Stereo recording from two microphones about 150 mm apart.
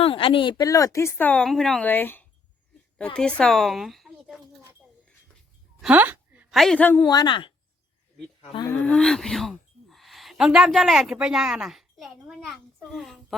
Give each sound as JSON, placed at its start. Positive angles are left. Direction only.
{"t": 0.0, "sound": "a woman's voice", "side_deg": 35}
{"t": 5.8, "sound": "a woman's voice", "side_deg": -10}
{"t": 7.0, "sound": "speech", "side_deg": 25}
{"t": 8.7, "sound": "speech", "side_deg": 10}